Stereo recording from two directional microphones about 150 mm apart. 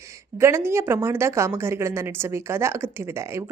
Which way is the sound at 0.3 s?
15° right (ahead or behind).